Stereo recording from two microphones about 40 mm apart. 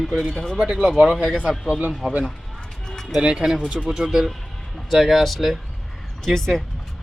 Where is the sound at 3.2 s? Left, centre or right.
Right.